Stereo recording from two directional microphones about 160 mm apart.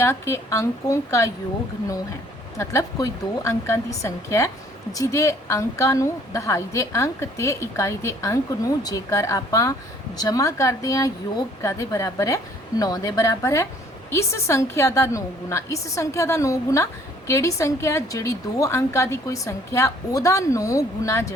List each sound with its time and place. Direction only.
0.0 s a woman's voice: 15° left (ahead or behind)
2.6 s a woman's voice: 15° left (ahead or behind)